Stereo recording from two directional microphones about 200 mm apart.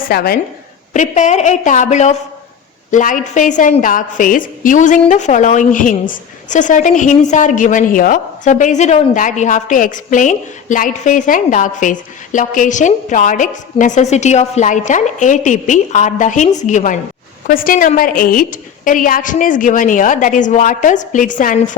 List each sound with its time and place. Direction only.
0.1 s a woman's voice: 50° left (ahead or behind)
0.9 s a woman's voice: 35° left (ahead or behind)